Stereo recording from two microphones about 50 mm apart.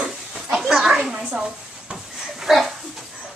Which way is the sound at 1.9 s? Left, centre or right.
Centre.